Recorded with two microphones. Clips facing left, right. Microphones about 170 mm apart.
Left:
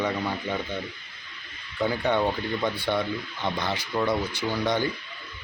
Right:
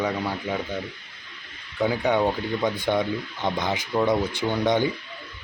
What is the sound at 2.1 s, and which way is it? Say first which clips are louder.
Speech: right 2 dB; 15° right (ahead or behind).